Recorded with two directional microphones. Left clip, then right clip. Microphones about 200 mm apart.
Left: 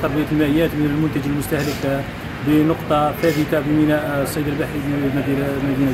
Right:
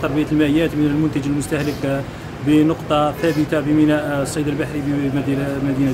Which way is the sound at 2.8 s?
30° right (ahead or behind).